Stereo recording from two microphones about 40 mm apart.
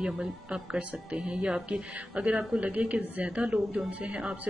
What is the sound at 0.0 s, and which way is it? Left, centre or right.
A woman's voice, centre.